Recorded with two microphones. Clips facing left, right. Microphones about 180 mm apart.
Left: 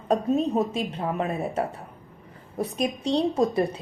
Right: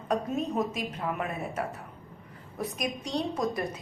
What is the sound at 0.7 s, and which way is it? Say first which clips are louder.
A woman's voice: left 5 dB; 30° left (ahead or behind).